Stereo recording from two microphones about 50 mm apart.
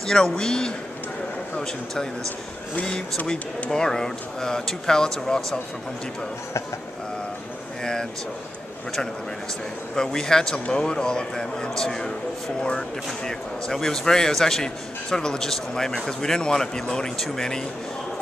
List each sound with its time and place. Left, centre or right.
0.0 s speech: centre
3.7 s speech: centre
7.8 s speech: centre
9.9 s speech: centre